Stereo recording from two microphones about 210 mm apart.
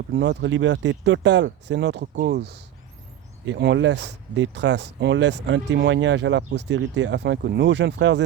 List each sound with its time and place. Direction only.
0.1 s speech: 55° right (ahead or behind)